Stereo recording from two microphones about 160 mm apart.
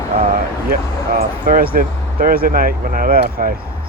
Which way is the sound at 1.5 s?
65° right (ahead or behind).